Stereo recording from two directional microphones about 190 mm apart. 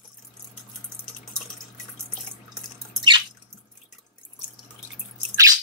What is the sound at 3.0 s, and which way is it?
Drip, 25° right (ahead or behind).